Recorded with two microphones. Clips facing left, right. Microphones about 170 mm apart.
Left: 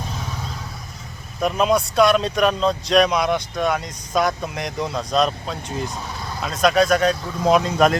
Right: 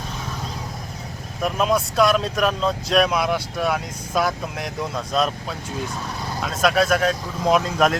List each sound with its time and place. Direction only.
1.4 s speech: centre (ahead or behind)